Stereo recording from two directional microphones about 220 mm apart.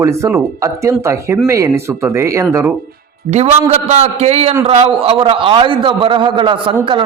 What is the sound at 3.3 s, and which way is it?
A man's voice, 30° right (ahead or behind).